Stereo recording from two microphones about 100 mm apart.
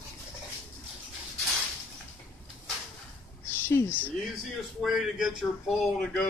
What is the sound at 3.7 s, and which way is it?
Speech, 25° left (ahead or behind).